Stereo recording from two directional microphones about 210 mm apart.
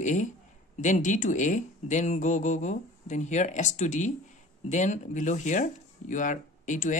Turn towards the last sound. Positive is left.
turn(degrees=35)  # may be behind; listen again after turning